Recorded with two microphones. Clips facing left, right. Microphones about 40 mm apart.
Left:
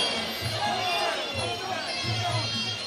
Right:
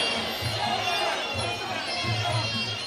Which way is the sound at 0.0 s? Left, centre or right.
Centre.